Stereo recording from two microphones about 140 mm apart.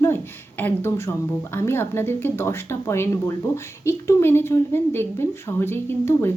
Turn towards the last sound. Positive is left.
turn(degrees=15)  # may be behind; listen again after turning